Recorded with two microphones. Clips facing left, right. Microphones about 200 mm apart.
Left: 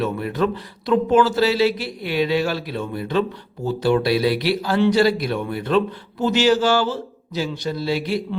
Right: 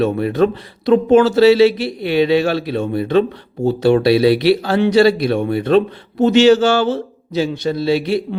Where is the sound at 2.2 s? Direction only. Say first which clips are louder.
Right 6 dB; 70° right (ahead or behind).